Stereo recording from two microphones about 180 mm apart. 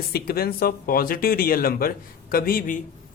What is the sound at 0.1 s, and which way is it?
A woman's voice, 55° left (ahead or behind).